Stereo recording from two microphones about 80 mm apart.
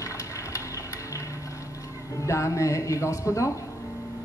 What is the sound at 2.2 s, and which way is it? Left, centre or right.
Speech, left.